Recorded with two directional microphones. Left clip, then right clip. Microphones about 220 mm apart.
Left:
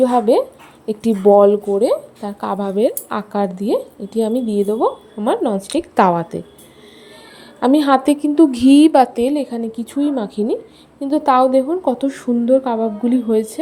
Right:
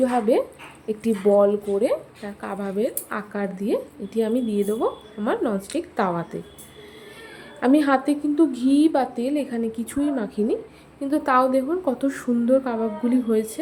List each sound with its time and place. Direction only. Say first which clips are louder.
0.0 s a woman's voice: left 7 dB; 25° left (ahead or behind)
7.6 s a woman's voice: left 6 dB; 25° left (ahead or behind)